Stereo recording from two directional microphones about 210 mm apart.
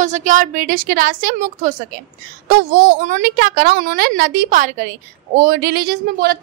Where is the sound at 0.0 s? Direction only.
35° right (ahead or behind).